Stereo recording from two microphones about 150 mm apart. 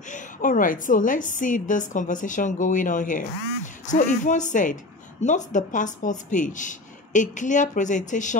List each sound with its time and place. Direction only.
0.1 s speech: 65° left (ahead or behind)